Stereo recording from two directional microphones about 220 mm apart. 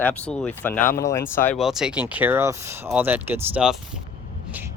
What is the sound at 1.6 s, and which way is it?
Speech, centre (ahead or behind).